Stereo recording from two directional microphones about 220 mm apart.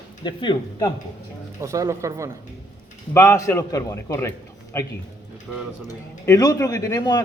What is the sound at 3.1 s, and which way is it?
A man's voice, 15° left (ahead or behind).